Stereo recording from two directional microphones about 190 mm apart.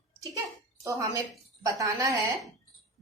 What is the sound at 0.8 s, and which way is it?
A woman's voice, 15° right (ahead or behind).